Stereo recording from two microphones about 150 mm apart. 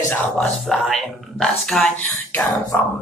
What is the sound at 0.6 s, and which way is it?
Speech, centre (ahead or behind).